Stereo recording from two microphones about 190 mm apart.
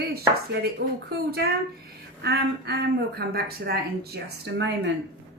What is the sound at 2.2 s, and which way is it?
Speech, 55° right (ahead or behind).